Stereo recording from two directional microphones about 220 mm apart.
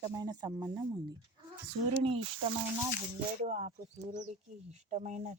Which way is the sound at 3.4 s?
30° right (ahead or behind).